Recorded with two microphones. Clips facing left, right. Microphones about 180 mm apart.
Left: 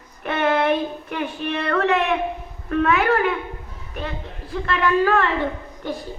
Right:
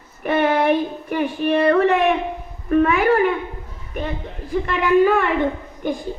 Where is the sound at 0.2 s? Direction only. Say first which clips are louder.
Right 3 dB; 10° right (ahead or behind).